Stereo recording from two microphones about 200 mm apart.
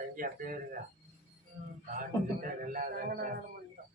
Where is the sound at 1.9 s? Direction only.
45° right (ahead or behind).